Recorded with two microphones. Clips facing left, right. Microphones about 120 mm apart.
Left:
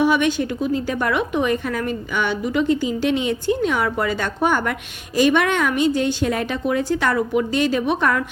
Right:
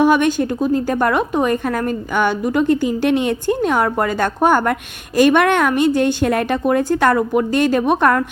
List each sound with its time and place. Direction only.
0.0 s a woman's voice: 45° right (ahead or behind)